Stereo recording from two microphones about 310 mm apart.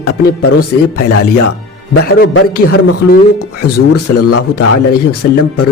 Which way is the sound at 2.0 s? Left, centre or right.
Left.